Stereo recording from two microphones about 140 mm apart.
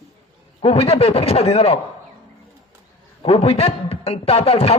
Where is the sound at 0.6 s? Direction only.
45° left (ahead or behind).